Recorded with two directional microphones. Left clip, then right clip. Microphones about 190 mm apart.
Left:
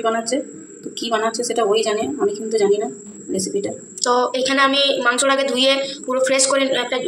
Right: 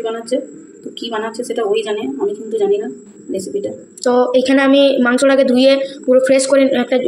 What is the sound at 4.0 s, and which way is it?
A woman's voice, 35° right (ahead or behind).